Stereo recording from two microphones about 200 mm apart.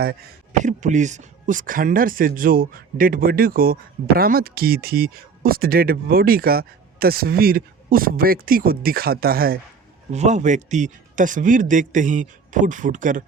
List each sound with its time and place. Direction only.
0.6 s speech: 35° right (ahead or behind)
10.1 s speech: 35° right (ahead or behind)